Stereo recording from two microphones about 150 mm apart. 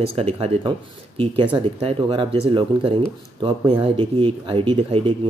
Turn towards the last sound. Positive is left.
turn(degrees=-35)  # may be behind; listen again after turning